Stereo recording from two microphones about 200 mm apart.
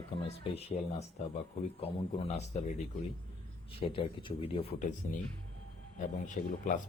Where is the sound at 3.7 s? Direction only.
25° left (ahead or behind).